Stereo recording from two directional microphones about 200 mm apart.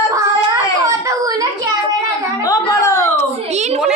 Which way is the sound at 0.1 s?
15° right (ahead or behind).